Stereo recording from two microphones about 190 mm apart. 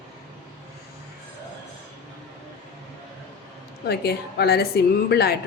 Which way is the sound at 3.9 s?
60° left (ahead or behind).